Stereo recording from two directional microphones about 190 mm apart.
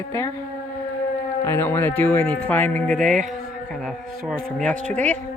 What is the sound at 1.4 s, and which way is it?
Speech, 10° left (ahead or behind).